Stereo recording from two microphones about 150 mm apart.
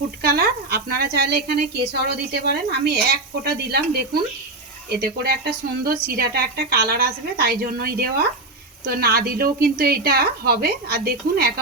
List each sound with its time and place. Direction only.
0.2 s a woman's voice: 90° right